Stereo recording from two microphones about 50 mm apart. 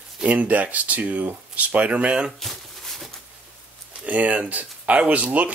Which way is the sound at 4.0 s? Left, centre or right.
Right.